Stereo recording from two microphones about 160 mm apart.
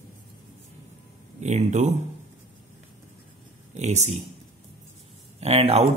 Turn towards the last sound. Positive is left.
turn(degrees=-40)  # may be behind; listen again after turning